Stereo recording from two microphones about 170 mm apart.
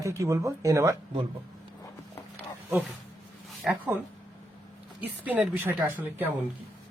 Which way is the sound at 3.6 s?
Centre (ahead or behind).